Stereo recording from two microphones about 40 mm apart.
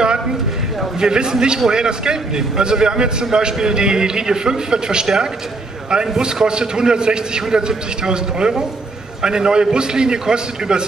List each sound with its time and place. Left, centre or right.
1.0 s a man's voice: centre
6.4 s a man's voice: centre